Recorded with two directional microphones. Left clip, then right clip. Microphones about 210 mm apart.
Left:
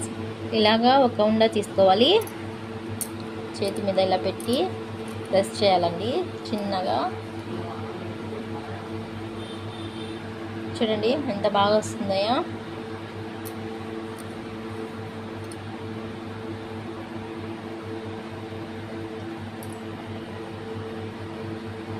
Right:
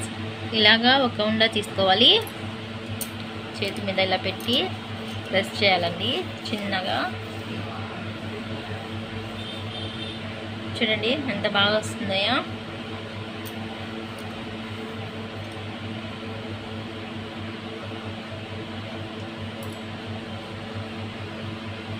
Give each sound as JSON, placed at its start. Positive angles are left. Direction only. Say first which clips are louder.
{"t": 0.5, "sound": "speech", "louder": "right 1 dB", "side_deg": 30}
{"t": 3.6, "sound": "a woman's voice", "louder": "left 2 dB", "side_deg": 30}
{"t": 10.8, "sound": "a woman's voice", "louder": "even", "side_deg": 35}